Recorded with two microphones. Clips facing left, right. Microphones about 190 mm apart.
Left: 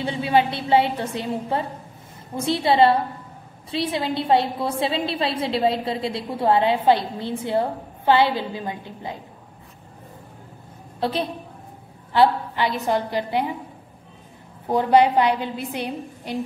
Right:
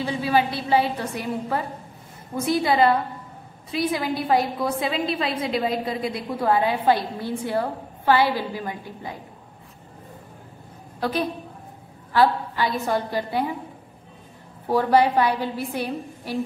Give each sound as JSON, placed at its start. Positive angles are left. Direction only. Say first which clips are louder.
{"t": 0.0, "sound": "a woman's voice", "louder": "left 2 dB", "side_deg": 25}
{"t": 11.0, "sound": "a woman's voice", "louder": "even", "side_deg": 25}
{"t": 14.7, "sound": "a woman's voice", "louder": "left 2 dB", "side_deg": 20}